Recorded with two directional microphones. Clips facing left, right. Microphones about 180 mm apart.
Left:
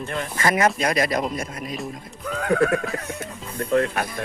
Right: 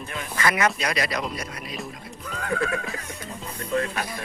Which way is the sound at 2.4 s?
60° left (ahead or behind).